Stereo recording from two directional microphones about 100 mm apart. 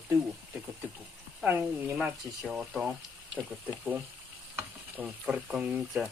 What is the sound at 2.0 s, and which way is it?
Speech, 5° right (ahead or behind).